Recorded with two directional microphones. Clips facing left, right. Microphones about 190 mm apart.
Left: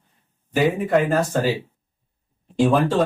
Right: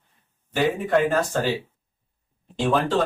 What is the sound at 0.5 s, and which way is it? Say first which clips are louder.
Speech: left 2 dB; 5° left (ahead or behind).